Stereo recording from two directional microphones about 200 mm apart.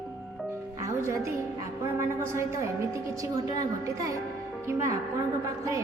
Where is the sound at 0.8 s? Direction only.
15° right (ahead or behind).